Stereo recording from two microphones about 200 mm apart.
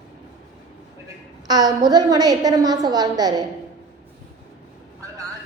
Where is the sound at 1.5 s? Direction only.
20° right (ahead or behind).